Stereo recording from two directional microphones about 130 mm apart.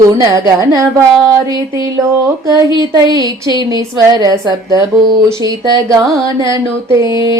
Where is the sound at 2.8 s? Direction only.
30° right (ahead or behind).